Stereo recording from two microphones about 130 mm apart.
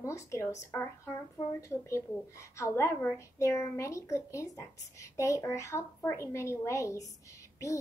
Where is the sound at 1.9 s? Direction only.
20° left (ahead or behind).